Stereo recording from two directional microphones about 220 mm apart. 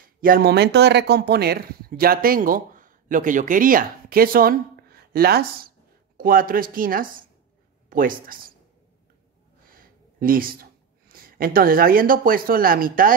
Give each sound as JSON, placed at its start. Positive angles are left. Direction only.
{"t": 0.2, "sound": "speech", "side_deg": -40}
{"t": 9.7, "sound": "speech", "side_deg": -40}